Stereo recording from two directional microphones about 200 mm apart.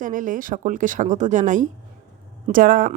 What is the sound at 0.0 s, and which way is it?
A woman's voice, 40° right (ahead or behind).